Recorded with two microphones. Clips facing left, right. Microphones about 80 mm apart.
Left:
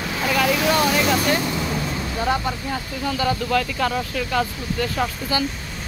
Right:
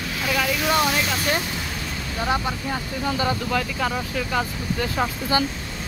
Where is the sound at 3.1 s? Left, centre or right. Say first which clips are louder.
Left 1 dB; right.